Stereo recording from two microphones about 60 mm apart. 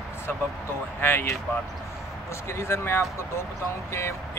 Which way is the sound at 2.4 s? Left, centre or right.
Left.